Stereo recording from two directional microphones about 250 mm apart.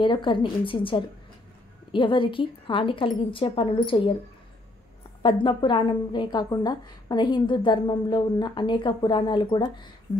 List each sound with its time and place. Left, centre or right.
0.0 s a woman's voice: centre
5.2 s a woman's voice: centre